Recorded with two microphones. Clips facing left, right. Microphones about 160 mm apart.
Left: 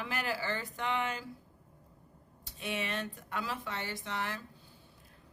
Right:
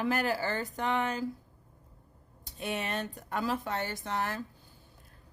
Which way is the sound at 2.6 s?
40° right (ahead or behind).